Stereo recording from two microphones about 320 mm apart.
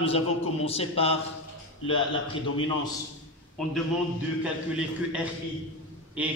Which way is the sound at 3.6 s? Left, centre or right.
Centre.